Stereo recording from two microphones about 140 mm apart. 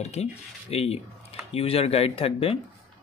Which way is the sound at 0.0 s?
50° left (ahead or behind).